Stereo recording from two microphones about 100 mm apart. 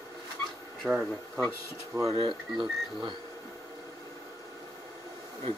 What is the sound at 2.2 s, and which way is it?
Speech, 55° right (ahead or behind).